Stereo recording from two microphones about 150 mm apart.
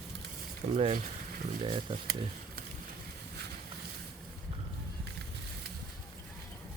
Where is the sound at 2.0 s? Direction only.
85° right.